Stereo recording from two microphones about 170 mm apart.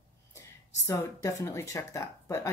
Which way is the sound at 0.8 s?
15° left (ahead or behind).